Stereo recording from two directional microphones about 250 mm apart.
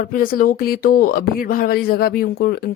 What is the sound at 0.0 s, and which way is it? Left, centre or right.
A woman's voice, left.